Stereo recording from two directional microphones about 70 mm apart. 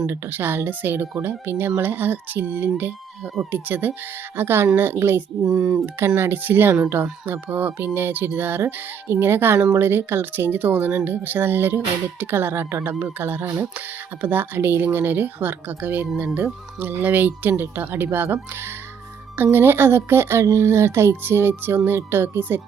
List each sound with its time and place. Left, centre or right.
0.1 s speech: right
5.4 s speech: centre
6.1 s speech: right